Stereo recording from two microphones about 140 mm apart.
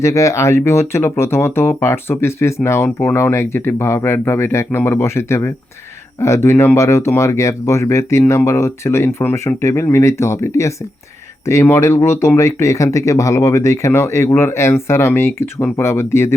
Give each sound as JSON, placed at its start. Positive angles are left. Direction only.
{"t": 0.0, "sound": "speech", "side_deg": 20}